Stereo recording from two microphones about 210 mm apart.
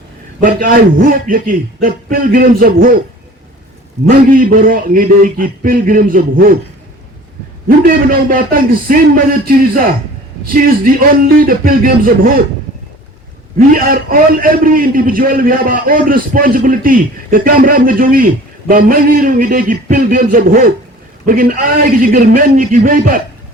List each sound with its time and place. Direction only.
0.4 s a man's voice: 40° right (ahead or behind)
4.1 s a man's voice: 40° right (ahead or behind)
7.9 s a man's voice: 40° right (ahead or behind)
13.6 s a man's voice: 45° right (ahead or behind)